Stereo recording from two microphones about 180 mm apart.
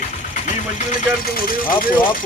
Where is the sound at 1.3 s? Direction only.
50° left (ahead or behind).